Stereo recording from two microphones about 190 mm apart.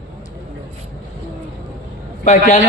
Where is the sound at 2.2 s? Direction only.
35° left (ahead or behind).